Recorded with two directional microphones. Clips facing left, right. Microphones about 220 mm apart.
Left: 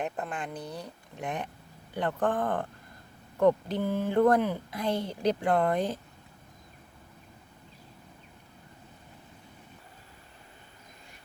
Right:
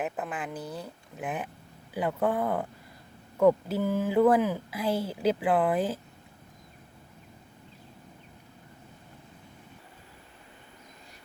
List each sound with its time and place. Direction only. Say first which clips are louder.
0.0 s speech: right 1 dB; 5° right (ahead or behind)